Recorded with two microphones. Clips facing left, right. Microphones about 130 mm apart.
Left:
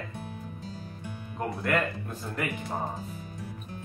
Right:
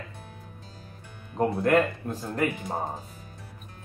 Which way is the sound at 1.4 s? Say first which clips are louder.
Right 6 dB; 30° right (ahead or behind).